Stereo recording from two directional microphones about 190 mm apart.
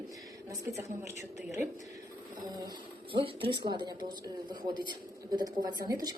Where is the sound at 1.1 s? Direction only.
40° left (ahead or behind).